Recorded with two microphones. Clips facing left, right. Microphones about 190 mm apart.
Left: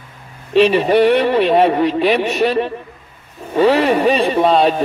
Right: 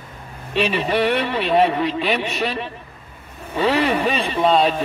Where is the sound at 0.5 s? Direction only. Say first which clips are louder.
Left 8 dB; 45° left (ahead or behind).